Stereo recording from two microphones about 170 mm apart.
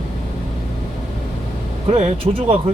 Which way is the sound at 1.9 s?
35° right (ahead or behind).